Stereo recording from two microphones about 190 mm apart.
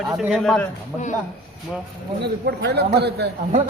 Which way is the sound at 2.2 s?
60° right (ahead or behind).